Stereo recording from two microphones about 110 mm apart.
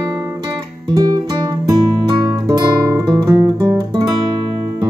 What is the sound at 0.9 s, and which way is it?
Music, 35° right (ahead or behind).